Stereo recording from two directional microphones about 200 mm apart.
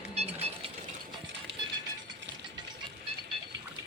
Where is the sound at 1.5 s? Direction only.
60° right (ahead or behind).